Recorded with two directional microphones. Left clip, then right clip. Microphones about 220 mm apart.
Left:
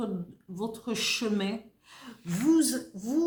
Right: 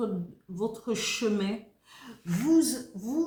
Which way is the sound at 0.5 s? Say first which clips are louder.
Right 3 dB; 35° left (ahead or behind).